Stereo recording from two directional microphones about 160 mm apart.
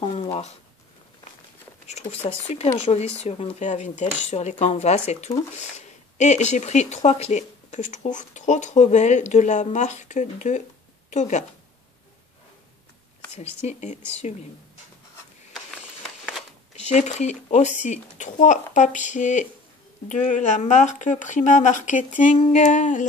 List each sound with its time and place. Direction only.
0.0 s speech: 40° left (ahead or behind)
1.9 s speech: 45° left (ahead or behind)
13.7 s speech: 45° left (ahead or behind)
16.9 s speech: 45° left (ahead or behind)